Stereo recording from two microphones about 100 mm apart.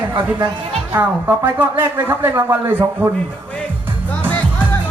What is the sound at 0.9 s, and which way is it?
Speech, 20° right (ahead or behind).